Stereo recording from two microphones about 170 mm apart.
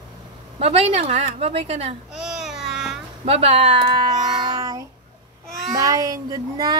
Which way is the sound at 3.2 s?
35° right (ahead or behind).